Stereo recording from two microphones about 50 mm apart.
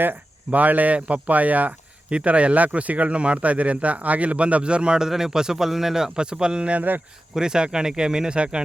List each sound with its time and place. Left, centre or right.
0.0 s speech: right; by 8.6 s centre